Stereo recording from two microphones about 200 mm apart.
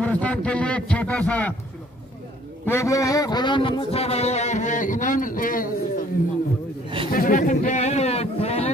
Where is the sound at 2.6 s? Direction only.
15° left (ahead or behind); by 5.7 s 45° left (ahead or behind).